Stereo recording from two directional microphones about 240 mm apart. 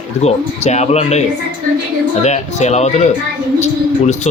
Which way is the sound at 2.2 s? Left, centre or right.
Left.